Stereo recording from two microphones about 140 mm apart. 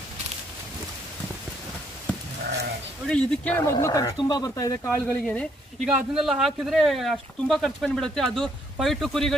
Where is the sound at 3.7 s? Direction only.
20° left (ahead or behind).